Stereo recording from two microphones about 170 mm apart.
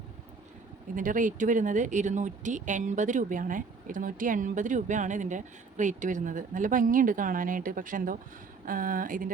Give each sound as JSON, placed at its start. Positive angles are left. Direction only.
{"t": 0.9, "sound": "speech", "side_deg": -50}